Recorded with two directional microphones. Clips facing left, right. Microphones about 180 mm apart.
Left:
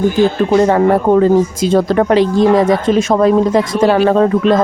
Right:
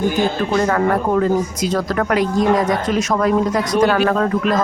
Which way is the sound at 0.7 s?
25° left (ahead or behind).